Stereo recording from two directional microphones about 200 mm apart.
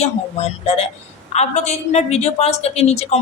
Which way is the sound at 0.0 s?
30° left (ahead or behind).